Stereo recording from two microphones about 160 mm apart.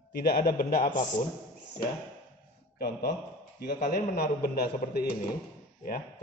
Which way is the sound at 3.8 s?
70° left (ahead or behind).